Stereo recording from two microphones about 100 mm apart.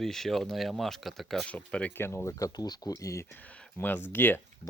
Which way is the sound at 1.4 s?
10° left (ahead or behind).